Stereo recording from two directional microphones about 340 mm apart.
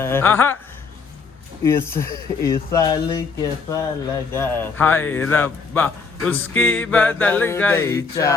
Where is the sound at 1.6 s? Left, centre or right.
Centre.